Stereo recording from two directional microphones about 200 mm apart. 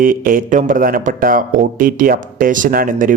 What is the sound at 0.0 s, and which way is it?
Speech, 45° right (ahead or behind).